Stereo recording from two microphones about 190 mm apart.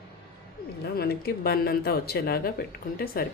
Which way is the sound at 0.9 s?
55° left (ahead or behind).